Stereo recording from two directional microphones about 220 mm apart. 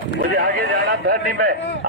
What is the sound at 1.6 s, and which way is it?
Speech, 55° left (ahead or behind).